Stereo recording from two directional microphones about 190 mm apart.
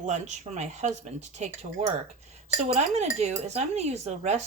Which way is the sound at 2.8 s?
35° right (ahead or behind).